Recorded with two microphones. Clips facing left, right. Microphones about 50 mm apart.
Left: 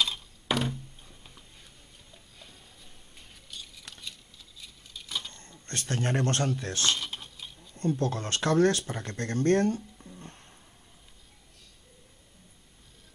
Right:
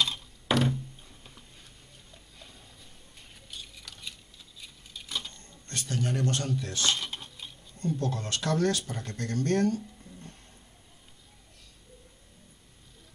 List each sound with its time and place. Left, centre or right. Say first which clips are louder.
0.0 s a sound: even; centre
3.2 s scissors: even; centre
4.6 s patter: right 1 dB; centre
5.7 s speech: left 2 dB; left
6.9 s a sound: even; centre
8.0 s speech: left 3 dB; left